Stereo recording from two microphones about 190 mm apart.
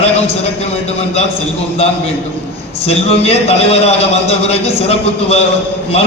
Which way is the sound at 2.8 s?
30° left (ahead or behind).